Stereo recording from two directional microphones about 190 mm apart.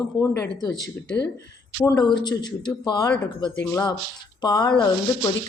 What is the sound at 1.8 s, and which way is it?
Speech, 20° left (ahead or behind).